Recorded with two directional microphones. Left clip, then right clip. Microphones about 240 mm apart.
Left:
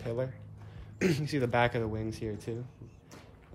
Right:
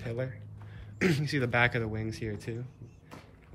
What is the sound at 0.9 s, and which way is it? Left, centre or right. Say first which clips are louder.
Speech: right 1 dB; centre.